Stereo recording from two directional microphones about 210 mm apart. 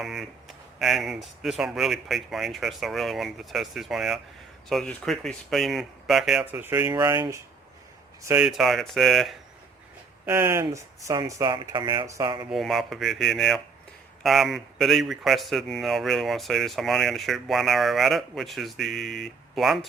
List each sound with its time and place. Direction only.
0.0 s speech: centre (ahead or behind)
10.2 s speech: 15° right (ahead or behind)
12.5 s speech: centre (ahead or behind)